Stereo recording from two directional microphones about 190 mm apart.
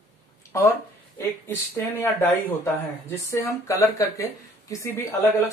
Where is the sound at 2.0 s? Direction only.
15° left (ahead or behind).